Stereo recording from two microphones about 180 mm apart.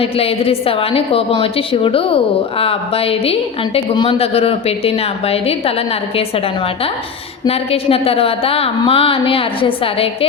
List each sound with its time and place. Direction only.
0.0 s a woman's voice: 30° left (ahead or behind)
7.4 s a woman's voice: 30° left (ahead or behind)